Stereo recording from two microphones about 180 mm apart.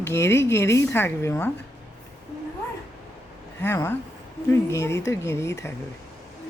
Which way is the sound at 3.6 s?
10° left (ahead or behind).